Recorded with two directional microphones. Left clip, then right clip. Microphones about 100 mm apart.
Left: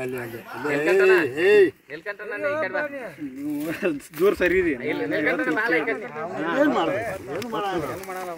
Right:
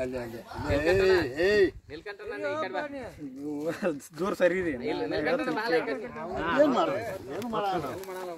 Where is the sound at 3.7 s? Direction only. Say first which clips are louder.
Left 5 dB; 60° right (ahead or behind).